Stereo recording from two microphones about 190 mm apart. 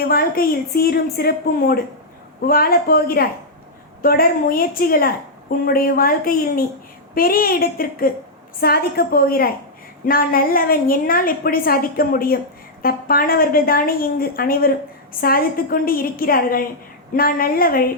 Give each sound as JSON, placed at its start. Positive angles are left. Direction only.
{"t": 0.0, "sound": "a woman's voice", "side_deg": 50}